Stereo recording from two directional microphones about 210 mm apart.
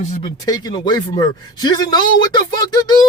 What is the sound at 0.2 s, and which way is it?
A man's voice, 20° left (ahead or behind).